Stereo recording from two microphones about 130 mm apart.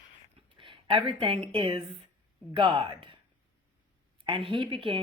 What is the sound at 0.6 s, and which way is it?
Speech, 40° right (ahead or behind).